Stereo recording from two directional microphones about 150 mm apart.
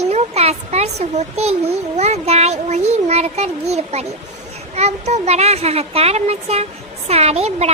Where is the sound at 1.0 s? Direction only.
45° right (ahead or behind).